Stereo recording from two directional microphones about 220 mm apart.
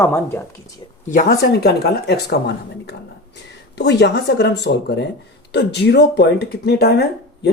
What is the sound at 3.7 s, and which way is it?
Speech, 50° left (ahead or behind).